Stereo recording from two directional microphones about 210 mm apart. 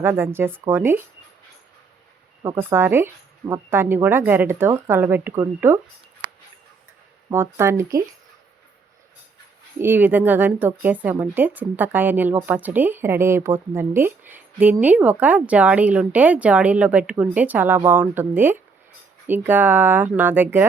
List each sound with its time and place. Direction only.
0.0 s a woman's voice: 10° right (ahead or behind)
2.4 s a woman's voice: 15° right (ahead or behind)
7.3 s a woman's voice: 10° right (ahead or behind)
9.7 s a woman's voice: 10° right (ahead or behind)